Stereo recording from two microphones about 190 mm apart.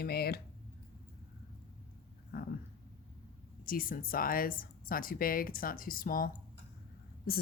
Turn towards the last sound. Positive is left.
turn(degrees=50)  # may be behind; listen again after turning